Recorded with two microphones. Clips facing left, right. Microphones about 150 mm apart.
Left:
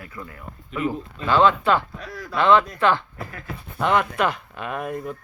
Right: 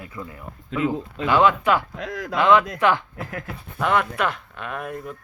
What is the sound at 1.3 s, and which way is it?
Speech, 10° right (ahead or behind).